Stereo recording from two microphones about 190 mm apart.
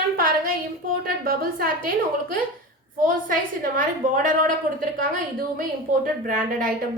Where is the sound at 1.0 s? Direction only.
50° right (ahead or behind).